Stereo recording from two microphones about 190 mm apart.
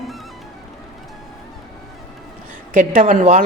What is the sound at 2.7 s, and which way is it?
Speech, 45° right (ahead or behind).